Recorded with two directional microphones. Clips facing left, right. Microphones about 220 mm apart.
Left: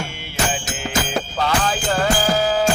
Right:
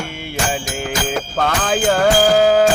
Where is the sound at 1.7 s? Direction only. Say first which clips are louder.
Right 6 dB; 65° right (ahead or behind).